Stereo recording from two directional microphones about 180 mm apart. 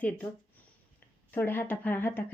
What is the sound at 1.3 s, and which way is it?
Speech, 10° left (ahead or behind).